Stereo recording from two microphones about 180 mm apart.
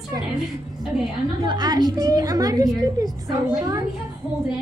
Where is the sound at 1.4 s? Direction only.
25° right (ahead or behind).